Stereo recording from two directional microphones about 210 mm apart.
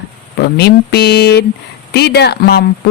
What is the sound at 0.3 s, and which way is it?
Speech, 50° left (ahead or behind).